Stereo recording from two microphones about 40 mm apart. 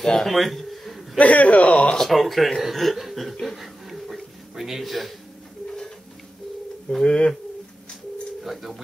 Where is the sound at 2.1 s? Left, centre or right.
Centre.